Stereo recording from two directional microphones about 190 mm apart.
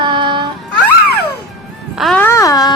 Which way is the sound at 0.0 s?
25° right (ahead or behind).